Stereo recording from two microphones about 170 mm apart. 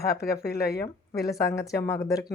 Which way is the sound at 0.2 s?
70° left (ahead or behind).